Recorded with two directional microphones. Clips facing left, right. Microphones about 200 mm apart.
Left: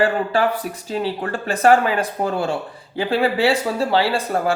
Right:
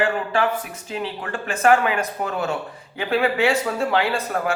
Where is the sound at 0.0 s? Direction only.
35° left (ahead or behind).